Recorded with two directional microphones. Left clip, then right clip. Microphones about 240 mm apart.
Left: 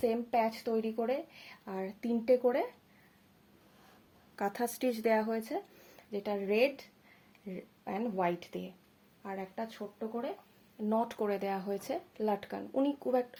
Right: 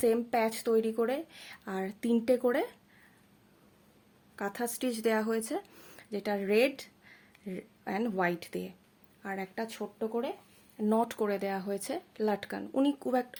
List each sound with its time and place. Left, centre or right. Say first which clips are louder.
0.0 s speech: right 3 dB; right
4.4 s speech: left 1 dB; centre; by 10.2 s right
10.8 s speech: right 3 dB; right